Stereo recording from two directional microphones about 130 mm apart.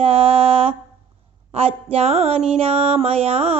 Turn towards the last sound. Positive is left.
turn(degrees=-50)  # may be behind; listen again after turning